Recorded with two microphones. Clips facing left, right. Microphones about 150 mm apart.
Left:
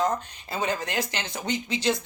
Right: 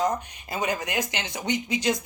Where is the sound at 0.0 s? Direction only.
15° right (ahead or behind).